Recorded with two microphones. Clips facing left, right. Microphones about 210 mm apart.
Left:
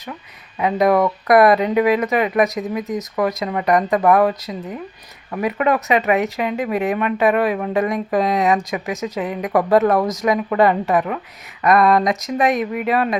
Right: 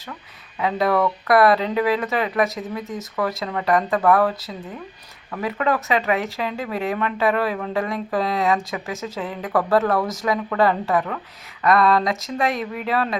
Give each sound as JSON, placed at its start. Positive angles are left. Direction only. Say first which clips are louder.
{"t": 0.6, "sound": "speech", "louder": "left 4 dB", "side_deg": 15}